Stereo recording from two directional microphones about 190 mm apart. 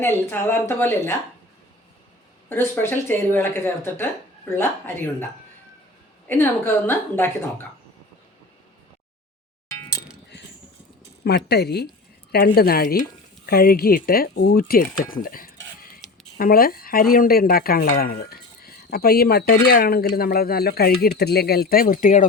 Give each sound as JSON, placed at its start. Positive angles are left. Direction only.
{"t": 0.0, "sound": "speech", "side_deg": 10}
{"t": 2.5, "sound": "speech", "side_deg": 10}
{"t": 6.2, "sound": "speech", "side_deg": 10}
{"t": 9.6, "sound": "a sound", "side_deg": 15}
{"t": 11.2, "sound": "speech", "side_deg": 60}
{"t": 16.0, "sound": "a sound", "side_deg": 0}
{"t": 16.4, "sound": "speech", "side_deg": 50}